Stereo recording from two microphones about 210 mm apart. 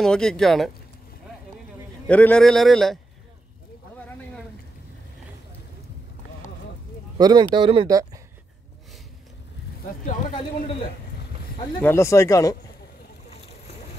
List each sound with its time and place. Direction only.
0.0 s a man's voice: 5° left (ahead or behind)
2.0 s a man's voice: 5° left (ahead or behind)
7.2 s speech: 20° right (ahead or behind)
11.8 s speech: 10° left (ahead or behind)